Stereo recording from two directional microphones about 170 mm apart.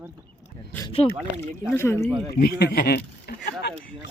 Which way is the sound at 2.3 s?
70° left (ahead or behind).